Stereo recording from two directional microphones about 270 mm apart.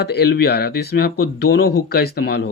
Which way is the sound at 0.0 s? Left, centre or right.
Left.